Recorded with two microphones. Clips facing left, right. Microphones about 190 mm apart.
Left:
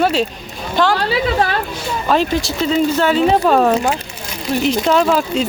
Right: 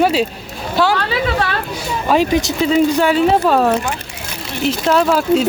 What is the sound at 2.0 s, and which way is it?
A woman's voice, 10° right (ahead or behind).